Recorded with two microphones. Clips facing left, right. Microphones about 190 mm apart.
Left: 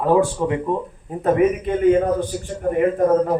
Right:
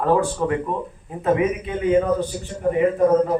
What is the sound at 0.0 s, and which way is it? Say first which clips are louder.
Speech: left 2 dB; 15° left (ahead or behind).